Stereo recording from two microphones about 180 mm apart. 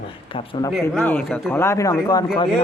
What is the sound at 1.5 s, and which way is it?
Speech, 15° left (ahead or behind).